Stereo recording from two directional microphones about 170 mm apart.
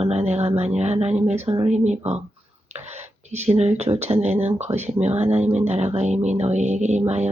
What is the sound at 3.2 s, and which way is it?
Speech, 40° right (ahead or behind).